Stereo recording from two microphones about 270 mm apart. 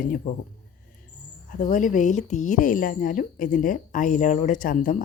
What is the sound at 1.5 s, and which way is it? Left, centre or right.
A woman's voice, left.